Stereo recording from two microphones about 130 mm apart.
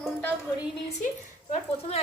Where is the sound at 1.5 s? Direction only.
50° left (ahead or behind).